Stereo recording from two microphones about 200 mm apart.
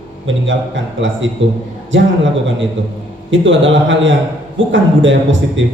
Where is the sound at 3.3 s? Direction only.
70° right (ahead or behind).